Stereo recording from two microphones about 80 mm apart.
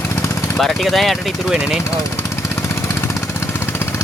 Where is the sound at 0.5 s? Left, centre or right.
Centre.